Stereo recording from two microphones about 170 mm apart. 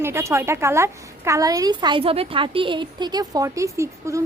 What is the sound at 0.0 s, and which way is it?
A woman's voice, 15° right (ahead or behind).